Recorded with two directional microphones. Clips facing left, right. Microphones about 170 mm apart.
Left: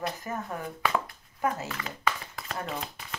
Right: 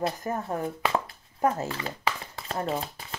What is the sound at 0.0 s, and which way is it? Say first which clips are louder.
Speech: right 4 dB; 30° right (ahead or behind).